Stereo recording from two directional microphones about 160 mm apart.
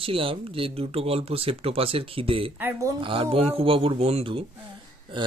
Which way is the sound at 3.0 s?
35° right (ahead or behind).